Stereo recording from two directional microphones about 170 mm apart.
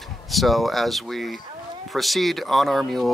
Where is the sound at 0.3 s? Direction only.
Centre (ahead or behind).